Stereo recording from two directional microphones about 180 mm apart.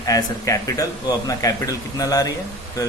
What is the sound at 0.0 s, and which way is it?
A man's voice, 20° left (ahead or behind).